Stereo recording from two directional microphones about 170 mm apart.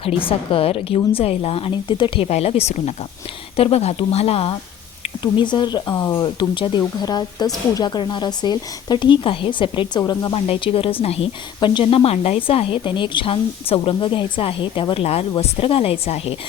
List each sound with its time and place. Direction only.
0.0 s a woman's voice: 30° left (ahead or behind)